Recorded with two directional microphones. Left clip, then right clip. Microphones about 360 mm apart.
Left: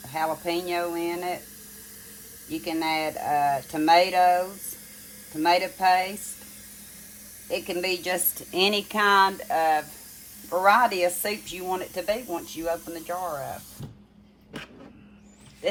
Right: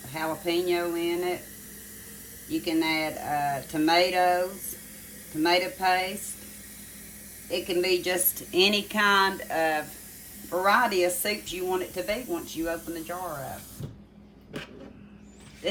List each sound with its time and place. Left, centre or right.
0.1 s speech: centre
2.5 s speech: centre
7.5 s speech: centre
15.6 s a sound: centre